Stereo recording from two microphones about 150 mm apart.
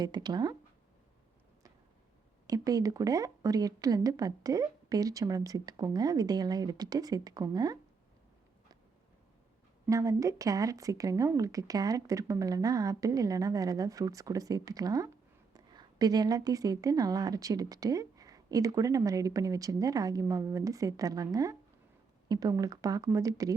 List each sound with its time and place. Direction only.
0.0 s speech: 30° right (ahead or behind)
2.5 s speech: 25° right (ahead or behind)
9.9 s speech: 20° right (ahead or behind)